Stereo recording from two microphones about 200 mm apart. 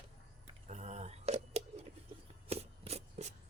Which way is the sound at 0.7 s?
35° right (ahead or behind).